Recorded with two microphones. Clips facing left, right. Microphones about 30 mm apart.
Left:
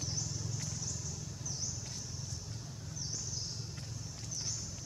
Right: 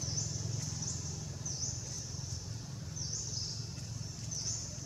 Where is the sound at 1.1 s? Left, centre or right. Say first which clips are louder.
Even; centre.